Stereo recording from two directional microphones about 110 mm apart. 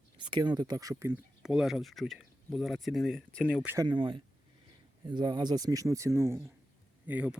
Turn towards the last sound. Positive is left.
turn(degrees=-15)  # may be behind; listen again after turning